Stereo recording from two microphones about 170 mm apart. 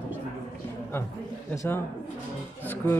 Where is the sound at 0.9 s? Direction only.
15° left (ahead or behind).